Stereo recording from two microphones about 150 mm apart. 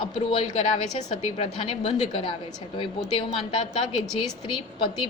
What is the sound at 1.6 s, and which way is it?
A woman's voice, 40° left (ahead or behind).